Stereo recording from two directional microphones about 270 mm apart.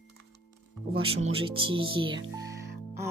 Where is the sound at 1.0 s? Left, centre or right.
Right.